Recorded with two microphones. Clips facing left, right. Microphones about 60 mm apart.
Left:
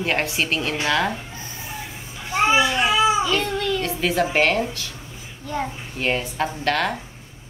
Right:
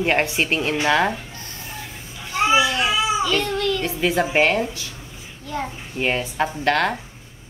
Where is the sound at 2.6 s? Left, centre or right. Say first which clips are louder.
Left 2 dB; centre.